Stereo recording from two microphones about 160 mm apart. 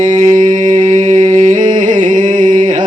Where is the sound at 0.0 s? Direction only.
45° right (ahead or behind).